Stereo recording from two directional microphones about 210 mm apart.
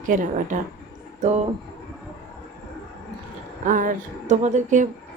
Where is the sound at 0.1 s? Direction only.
35° right (ahead or behind).